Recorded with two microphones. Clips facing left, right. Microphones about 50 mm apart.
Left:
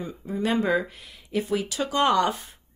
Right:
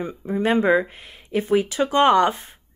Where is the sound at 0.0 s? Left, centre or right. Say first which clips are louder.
Right 5 dB; right.